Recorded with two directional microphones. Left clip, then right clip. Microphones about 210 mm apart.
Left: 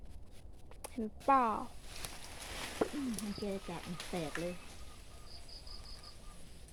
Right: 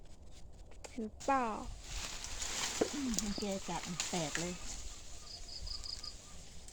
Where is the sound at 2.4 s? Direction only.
45° right (ahead or behind).